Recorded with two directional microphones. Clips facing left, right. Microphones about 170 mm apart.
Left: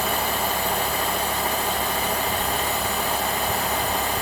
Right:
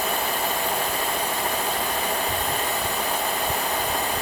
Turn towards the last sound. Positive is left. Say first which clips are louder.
# left 1 dB
turn(degrees=0)  # may be behind; listen again after turning